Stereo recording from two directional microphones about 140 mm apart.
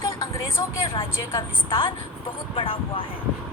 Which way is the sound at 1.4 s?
35° left (ahead or behind).